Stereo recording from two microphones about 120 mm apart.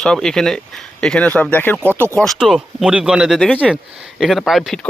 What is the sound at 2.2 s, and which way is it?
Speech, centre (ahead or behind).